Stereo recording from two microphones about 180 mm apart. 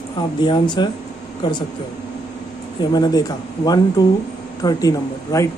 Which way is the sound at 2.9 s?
20° left (ahead or behind).